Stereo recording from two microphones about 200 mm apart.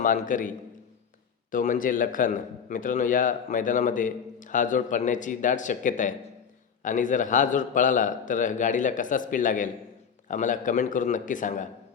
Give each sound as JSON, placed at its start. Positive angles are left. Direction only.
{"t": 0.0, "sound": "a man's voice", "side_deg": 40}